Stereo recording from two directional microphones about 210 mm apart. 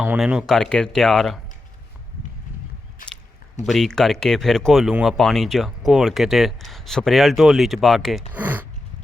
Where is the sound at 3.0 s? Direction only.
40° left (ahead or behind).